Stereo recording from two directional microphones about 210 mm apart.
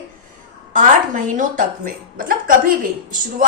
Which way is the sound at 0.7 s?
40° right (ahead or behind).